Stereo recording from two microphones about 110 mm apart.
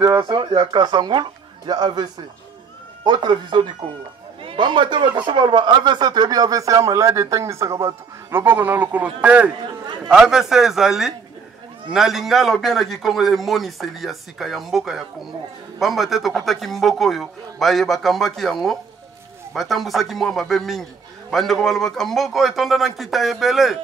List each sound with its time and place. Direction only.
0.0 s a man's voice: 45° right (ahead or behind)
3.1 s a man's voice: 40° right (ahead or behind); by 23.8 s centre (ahead or behind)